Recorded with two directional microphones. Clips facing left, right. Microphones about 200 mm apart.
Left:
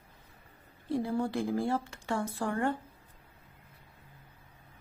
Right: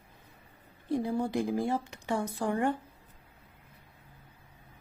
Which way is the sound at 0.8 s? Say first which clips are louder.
Right 1 dB; 15° right (ahead or behind).